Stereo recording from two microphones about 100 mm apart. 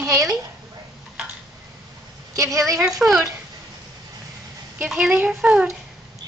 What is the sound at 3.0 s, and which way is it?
Speech, 5° right (ahead or behind).